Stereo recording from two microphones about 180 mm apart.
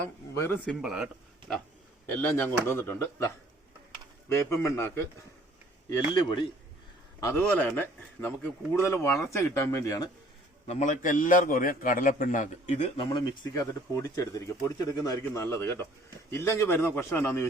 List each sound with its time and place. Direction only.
0.3 s speech: 10° left (ahead or behind)
0.8 s speech: 5° right (ahead or behind)
2.1 s speech: 10° left (ahead or behind)
4.3 s speech: 15° left (ahead or behind)
6.1 s a man's voice: 30° left (ahead or behind)
7.2 s speech: 15° left (ahead or behind)
10.7 s a man's voice: 40° left (ahead or behind)
13.1 s speech: 25° left (ahead or behind)